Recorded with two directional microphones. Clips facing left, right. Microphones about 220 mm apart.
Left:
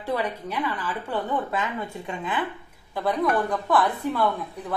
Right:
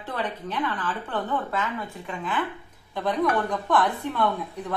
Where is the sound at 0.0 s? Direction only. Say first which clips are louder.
Left 4 dB; 10° left (ahead or behind).